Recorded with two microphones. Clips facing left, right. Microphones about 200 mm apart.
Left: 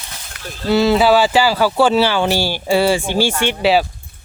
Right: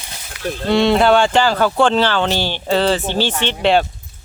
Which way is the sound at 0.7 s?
Centre (ahead or behind).